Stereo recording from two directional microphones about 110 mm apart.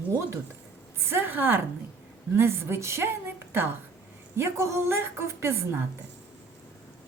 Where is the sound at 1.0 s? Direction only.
20° right (ahead or behind).